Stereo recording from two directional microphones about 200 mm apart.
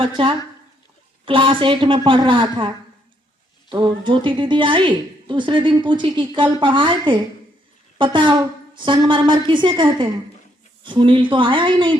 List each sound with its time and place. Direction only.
0.0 s a woman's voice: 25° right (ahead or behind)